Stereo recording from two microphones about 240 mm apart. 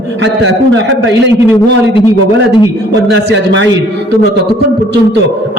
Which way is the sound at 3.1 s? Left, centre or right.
Right.